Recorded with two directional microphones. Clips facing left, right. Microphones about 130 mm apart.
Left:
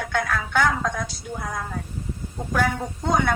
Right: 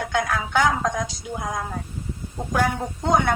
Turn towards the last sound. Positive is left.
turn(degrees=-10)  # may be behind; listen again after turning